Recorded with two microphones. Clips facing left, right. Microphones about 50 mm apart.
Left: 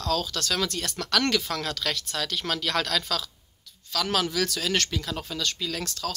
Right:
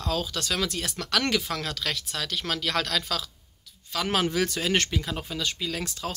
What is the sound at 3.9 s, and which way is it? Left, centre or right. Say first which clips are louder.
Speech: right 1 dB; right.